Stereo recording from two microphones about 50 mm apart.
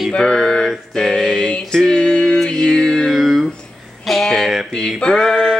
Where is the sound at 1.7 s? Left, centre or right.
Centre.